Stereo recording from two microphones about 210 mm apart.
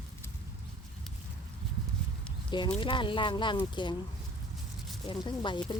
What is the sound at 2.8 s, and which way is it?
Speech, 25° left (ahead or behind).